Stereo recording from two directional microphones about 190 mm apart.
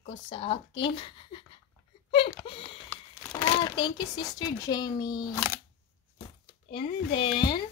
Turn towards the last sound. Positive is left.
turn(degrees=25)  # may be behind; listen again after turning